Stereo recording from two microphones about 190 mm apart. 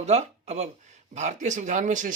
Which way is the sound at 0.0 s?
35° right (ahead or behind).